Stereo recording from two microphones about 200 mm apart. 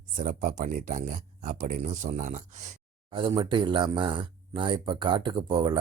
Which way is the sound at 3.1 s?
25° right (ahead or behind).